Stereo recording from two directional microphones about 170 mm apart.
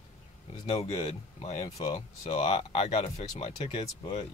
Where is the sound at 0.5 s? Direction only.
35° left (ahead or behind).